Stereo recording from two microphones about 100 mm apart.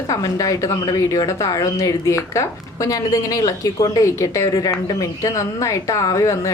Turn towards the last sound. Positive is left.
turn(degrees=35)  # may be behind; listen again after turning